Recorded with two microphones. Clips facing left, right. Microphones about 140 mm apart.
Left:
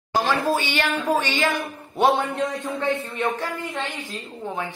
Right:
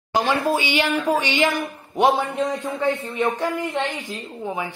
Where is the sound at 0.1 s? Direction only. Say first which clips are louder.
Right 1 dB; 15° right (ahead or behind).